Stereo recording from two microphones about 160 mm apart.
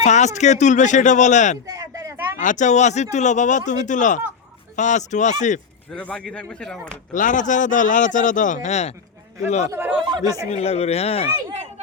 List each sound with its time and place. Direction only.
0.0 s speech: 45° left (ahead or behind)
1.6 s a sound: 25° right (ahead or behind)
2.4 s speech: 50° left (ahead or behind)
5.9 s speech: 10° left (ahead or behind)
7.1 s speech: 55° left (ahead or behind)
10.0 s a sound: 30° right (ahead or behind)
10.5 s speech: 40° left (ahead or behind)